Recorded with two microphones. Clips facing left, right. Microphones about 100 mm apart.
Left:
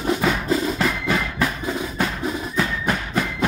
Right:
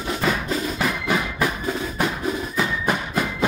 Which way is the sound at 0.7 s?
10° right (ahead or behind).